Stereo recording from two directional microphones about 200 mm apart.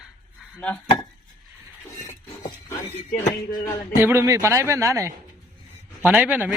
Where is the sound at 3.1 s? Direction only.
15° left (ahead or behind).